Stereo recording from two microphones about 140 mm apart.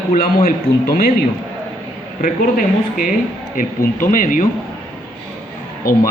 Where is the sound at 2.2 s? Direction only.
80° left.